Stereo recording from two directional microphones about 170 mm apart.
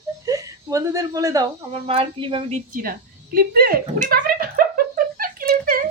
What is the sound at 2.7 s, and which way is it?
Speech, 60° right (ahead or behind).